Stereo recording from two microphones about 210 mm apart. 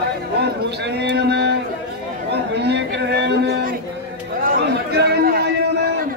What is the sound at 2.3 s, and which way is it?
Chatter, 55° right (ahead or behind).